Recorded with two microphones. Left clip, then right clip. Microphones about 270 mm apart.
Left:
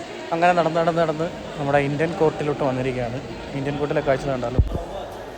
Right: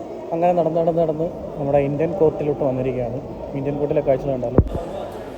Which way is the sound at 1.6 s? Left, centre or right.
Left.